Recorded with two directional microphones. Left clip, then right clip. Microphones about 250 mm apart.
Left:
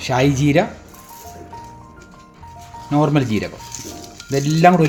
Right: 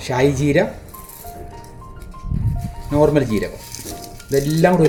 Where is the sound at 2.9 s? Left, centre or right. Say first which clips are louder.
Right 2 dB; left.